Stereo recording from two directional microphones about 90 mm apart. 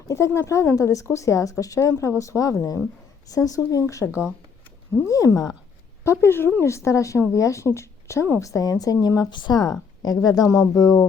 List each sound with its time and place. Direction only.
0.1 s a woman's voice: 35° left (ahead or behind)
6.1 s a woman's voice: 25° left (ahead or behind); by 11.0 s 40° left (ahead or behind)